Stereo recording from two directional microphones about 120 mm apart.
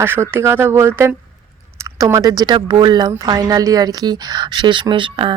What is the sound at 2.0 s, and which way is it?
Speech, 30° right (ahead or behind).